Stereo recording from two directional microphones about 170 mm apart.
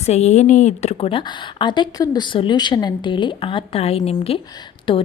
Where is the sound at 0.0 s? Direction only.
40° left (ahead or behind).